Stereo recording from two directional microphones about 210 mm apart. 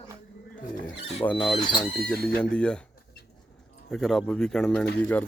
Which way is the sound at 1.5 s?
20° left (ahead or behind).